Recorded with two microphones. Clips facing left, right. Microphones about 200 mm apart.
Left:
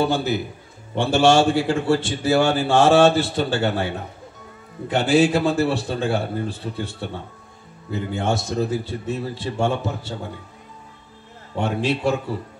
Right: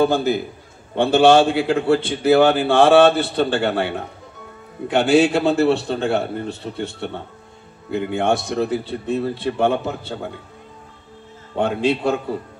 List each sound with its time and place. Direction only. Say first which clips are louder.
0.0 s a man's voice: right 4 dB; 50° right (ahead or behind)
11.5 s a man's voice: right 3 dB; 55° right (ahead or behind)